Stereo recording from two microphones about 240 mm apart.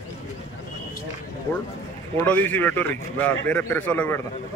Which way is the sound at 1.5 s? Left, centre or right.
Centre.